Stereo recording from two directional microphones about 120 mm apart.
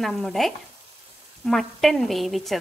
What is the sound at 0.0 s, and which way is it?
A woman's voice, 5° left (ahead or behind).